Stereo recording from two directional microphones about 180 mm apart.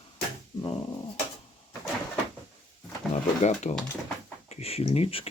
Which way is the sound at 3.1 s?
40° left (ahead or behind).